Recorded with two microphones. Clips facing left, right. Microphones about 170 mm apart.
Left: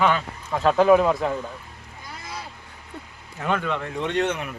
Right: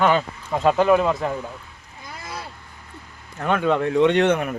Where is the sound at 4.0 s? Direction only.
75° right (ahead or behind); by 4.5 s 55° right (ahead or behind).